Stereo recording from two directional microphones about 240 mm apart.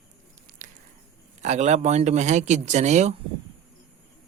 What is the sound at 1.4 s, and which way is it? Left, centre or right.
Speech, right.